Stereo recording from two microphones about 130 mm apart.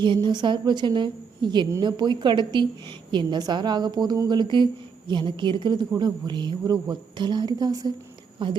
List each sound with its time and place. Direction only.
0.0 s a woman's voice: 35° right (ahead or behind)
8.4 s a woman's voice: 40° right (ahead or behind)